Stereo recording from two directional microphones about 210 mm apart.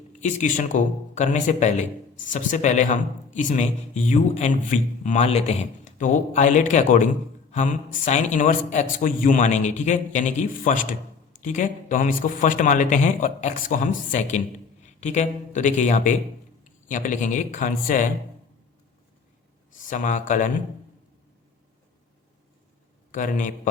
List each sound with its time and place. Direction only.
0.2 s speech: 35° left (ahead or behind)
19.9 s speech: 40° left (ahead or behind)
23.1 s speech: 40° left (ahead or behind)